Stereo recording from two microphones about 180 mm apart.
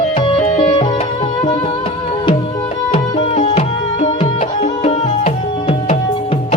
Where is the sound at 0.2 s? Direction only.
30° left (ahead or behind).